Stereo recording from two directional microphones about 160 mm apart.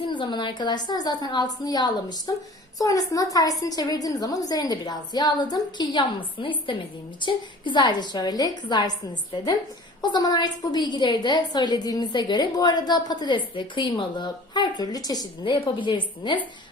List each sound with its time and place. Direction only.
0.0 s a woman's voice: 30° left (ahead or behind)